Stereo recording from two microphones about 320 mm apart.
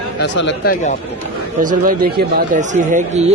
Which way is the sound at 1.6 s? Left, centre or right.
Right.